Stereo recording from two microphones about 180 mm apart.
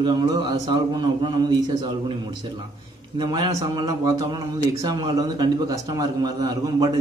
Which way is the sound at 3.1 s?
25° right (ahead or behind).